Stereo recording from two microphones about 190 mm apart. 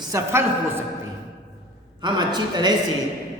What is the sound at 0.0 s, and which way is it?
Speech, 15° right (ahead or behind).